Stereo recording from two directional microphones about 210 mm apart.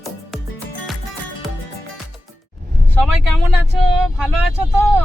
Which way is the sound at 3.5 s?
Centre (ahead or behind).